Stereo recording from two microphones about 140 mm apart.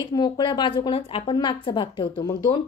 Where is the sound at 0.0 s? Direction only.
30° left (ahead or behind).